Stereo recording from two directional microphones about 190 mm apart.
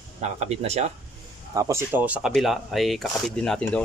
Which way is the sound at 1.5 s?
15° right (ahead or behind).